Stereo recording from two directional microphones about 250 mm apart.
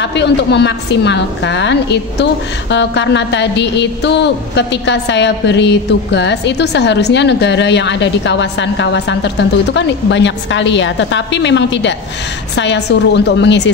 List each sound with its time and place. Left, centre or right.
0.0 s a woman's voice: left